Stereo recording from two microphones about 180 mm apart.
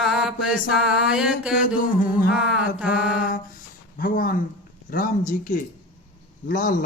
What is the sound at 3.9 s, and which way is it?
A man's voice, 50° left (ahead or behind).